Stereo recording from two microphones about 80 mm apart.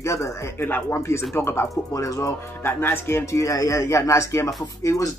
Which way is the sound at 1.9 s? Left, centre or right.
Left.